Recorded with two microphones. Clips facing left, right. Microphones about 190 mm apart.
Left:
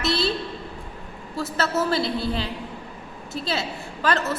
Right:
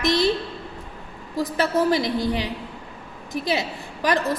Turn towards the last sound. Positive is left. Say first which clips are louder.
# right 2 dB
turn(degrees=-15)  # may be behind; listen again after turning